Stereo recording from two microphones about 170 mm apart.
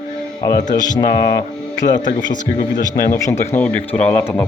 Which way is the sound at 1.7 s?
50° left (ahead or behind).